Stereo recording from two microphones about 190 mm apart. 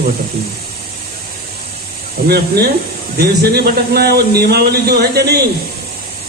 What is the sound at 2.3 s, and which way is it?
A man's voice, 55° right (ahead or behind).